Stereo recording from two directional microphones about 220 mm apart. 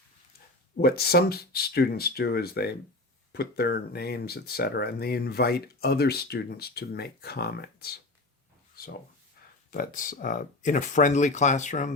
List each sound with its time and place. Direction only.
0.8 s speech: 45° left (ahead or behind)
8.7 s a sound: 40° left (ahead or behind)
9.7 s speech: 40° left (ahead or behind)